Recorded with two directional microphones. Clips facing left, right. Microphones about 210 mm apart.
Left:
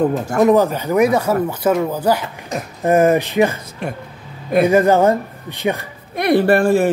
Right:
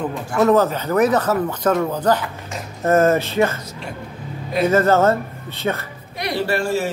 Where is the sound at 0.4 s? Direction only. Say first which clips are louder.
Left 2 dB; 15° left (ahead or behind).